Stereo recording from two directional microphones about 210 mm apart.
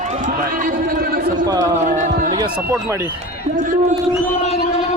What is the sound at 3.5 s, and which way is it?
Speech, 40° right (ahead or behind).